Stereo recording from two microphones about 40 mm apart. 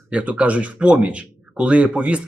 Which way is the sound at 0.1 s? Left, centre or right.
Right.